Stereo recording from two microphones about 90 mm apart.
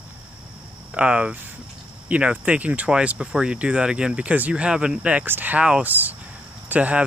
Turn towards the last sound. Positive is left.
turn(degrees=-15)  # may be behind; listen again after turning